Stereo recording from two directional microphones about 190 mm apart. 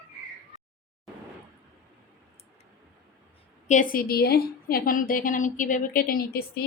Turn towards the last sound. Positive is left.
turn(degrees=50)  # may be behind; listen again after turning